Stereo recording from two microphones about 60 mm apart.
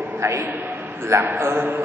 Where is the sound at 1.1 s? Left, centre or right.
Right.